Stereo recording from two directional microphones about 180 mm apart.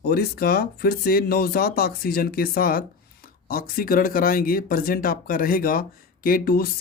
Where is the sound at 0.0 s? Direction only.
60° left (ahead or behind).